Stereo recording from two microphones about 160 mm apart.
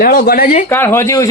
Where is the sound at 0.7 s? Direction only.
15° left (ahead or behind).